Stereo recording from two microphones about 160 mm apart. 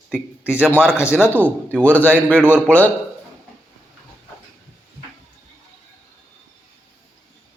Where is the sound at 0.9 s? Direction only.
15° left (ahead or behind).